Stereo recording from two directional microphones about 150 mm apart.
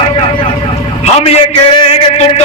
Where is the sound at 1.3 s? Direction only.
45° left (ahead or behind).